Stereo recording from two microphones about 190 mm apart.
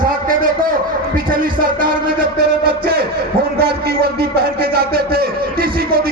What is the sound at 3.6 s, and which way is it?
A man's voice, 55° right (ahead or behind).